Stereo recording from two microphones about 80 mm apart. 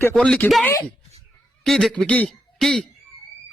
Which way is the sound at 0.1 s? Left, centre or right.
Centre.